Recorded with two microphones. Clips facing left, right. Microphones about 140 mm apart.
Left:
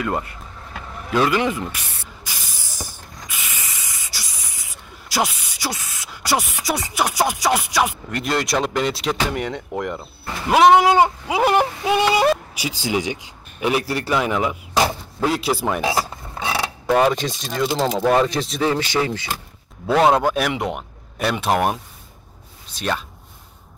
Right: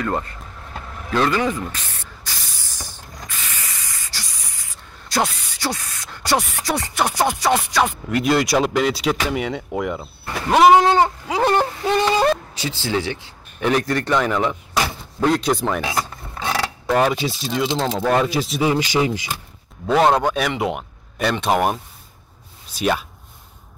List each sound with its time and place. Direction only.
0.0 s vehicle: 10° left (ahead or behind)
3.3 s spray: 15° left (ahead or behind)
5.1 s speech: 5° left (ahead or behind)
10.9 s speech: 15° left (ahead or behind)
15.8 s a sound: 25° left (ahead or behind)
16.4 s mechanisms: 5° left (ahead or behind)
17.1 s speech: 5° right (ahead or behind)
18.7 s speech: 15° right (ahead or behind)
19.9 s speech: 5° left (ahead or behind)
22.7 s speech: 10° right (ahead or behind)